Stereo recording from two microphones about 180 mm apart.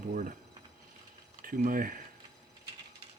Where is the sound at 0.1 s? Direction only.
50° right (ahead or behind).